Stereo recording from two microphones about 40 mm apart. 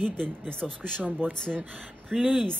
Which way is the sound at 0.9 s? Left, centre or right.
Right.